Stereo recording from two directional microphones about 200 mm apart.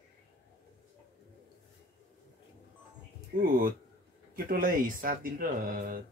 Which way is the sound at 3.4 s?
45° right (ahead or behind).